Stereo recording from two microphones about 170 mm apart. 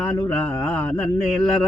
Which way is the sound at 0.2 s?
10° left (ahead or behind).